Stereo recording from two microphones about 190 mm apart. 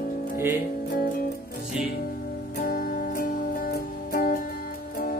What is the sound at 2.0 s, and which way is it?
Music, 50° left (ahead or behind).